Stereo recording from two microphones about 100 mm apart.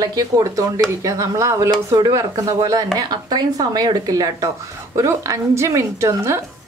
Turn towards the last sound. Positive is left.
turn(degrees=-30)  # may be behind; listen again after turning